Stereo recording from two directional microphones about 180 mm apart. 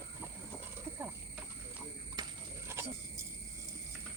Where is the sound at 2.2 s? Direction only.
25° right (ahead or behind).